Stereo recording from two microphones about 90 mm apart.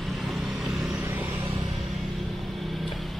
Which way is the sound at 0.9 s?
30° right (ahead or behind).